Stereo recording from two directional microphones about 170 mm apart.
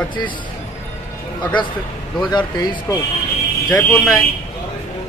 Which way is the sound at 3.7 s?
10° left (ahead or behind).